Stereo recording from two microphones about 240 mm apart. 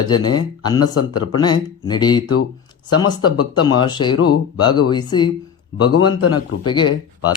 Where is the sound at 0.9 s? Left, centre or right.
Left.